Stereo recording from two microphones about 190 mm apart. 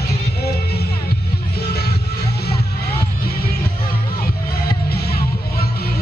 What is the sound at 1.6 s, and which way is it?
Music, 55° left (ahead or behind).